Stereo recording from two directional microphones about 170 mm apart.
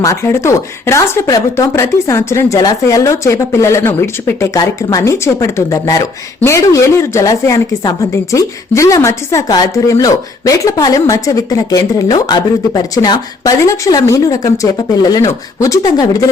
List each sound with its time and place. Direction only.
0.0 s speech: 15° left (ahead or behind)